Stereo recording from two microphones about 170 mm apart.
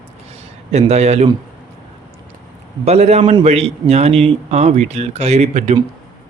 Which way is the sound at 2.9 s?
40° right (ahead or behind).